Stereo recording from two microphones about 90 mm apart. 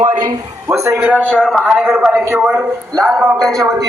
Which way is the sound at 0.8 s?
30° right (ahead or behind).